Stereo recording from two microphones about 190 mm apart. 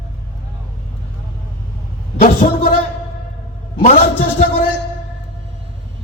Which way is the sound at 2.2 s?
45° left (ahead or behind).